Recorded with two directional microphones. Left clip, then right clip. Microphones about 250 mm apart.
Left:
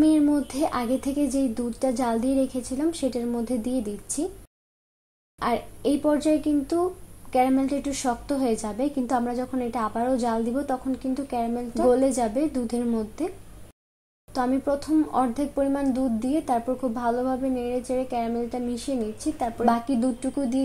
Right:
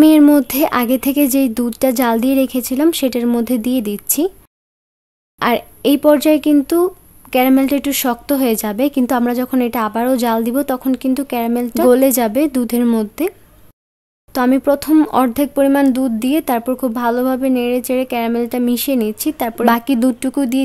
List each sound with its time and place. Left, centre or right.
0.0 s speech: right
5.4 s speech: right
14.3 s speech: right